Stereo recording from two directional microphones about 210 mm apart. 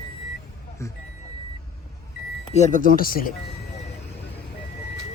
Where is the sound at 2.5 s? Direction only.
35° left (ahead or behind).